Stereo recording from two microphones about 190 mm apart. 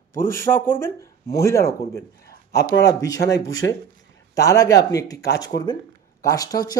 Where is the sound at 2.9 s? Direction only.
20° left (ahead or behind).